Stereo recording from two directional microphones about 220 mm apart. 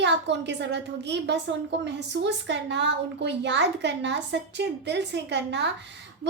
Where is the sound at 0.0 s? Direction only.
55° right (ahead or behind).